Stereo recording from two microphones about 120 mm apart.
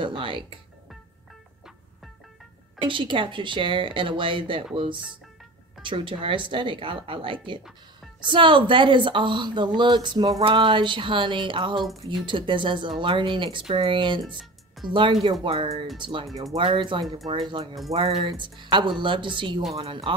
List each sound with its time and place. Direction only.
0.0 s music: 45° right (ahead or behind)
2.8 s speech: 45° right (ahead or behind)